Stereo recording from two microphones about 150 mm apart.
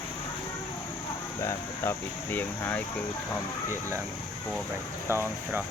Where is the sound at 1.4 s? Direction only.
20° left (ahead or behind).